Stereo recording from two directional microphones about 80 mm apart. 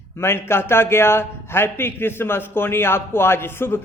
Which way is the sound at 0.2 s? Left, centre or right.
Left.